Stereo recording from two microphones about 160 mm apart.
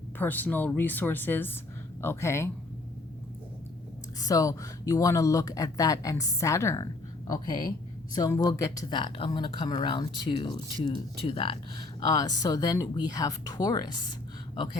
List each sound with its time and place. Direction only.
0.2 s speech: 10° left (ahead or behind)
4.2 s speech: 20° left (ahead or behind)